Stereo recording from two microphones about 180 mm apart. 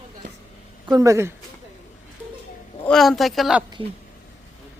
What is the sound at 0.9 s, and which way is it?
Speech, 15° right (ahead or behind).